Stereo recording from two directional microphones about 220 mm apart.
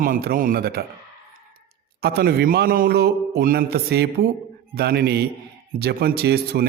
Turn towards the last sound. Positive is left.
turn(degrees=-45)  # may be behind; listen again after turning